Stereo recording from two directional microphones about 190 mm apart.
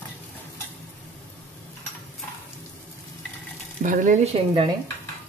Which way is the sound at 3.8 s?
45° right (ahead or behind).